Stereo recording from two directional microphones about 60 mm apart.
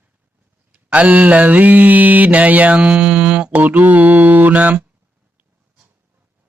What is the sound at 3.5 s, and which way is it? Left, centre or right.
Mantra, right.